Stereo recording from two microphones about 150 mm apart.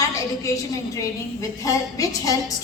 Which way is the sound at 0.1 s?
20° left (ahead or behind).